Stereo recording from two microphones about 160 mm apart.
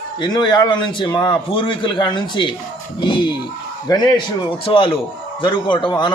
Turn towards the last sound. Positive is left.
turn(degrees=25)  # may be behind; listen again after turning